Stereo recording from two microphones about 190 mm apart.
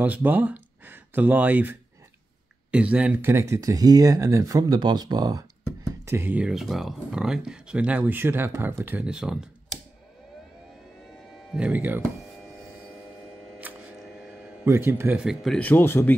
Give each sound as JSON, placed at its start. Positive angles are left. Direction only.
{"t": 0.0, "sound": "speech", "side_deg": -10}
{"t": 11.5, "sound": "speech", "side_deg": -5}
{"t": 13.6, "sound": "a sound", "side_deg": -10}